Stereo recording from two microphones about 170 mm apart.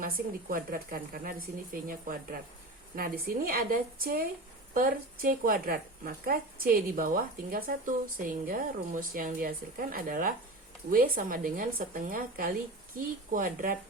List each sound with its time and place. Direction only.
0.0 s speech: 55° right (ahead or behind)